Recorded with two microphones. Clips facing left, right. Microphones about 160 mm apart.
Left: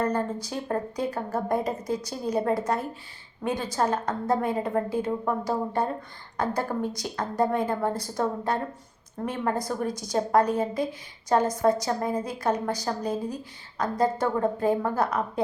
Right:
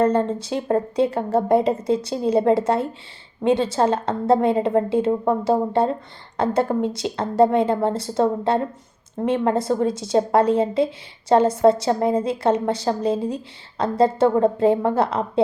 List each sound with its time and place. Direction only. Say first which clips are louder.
0.0 s a woman's voice: right 8 dB; 25° right (ahead or behind)